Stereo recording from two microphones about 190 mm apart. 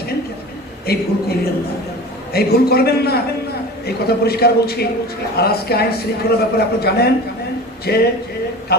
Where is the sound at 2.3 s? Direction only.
55° left (ahead or behind).